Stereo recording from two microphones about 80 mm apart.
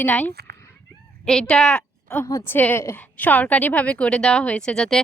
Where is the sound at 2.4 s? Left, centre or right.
Left.